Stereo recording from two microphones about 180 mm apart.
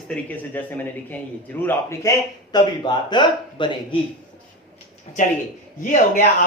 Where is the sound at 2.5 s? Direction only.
25° left (ahead or behind).